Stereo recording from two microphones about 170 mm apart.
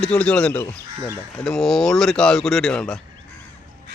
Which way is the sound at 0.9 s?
20° right (ahead or behind).